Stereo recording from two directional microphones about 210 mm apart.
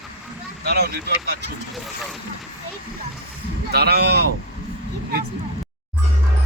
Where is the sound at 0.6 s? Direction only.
50° right (ahead or behind).